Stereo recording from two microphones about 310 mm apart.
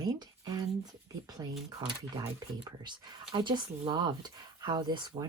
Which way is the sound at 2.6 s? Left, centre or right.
Centre.